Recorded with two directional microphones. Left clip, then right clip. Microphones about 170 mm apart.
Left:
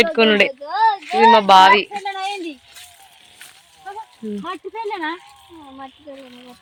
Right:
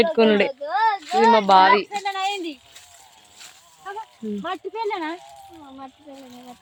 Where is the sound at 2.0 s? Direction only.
40° left (ahead or behind).